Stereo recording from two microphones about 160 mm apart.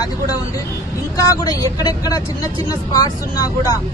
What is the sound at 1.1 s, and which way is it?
Speech, 20° left (ahead or behind).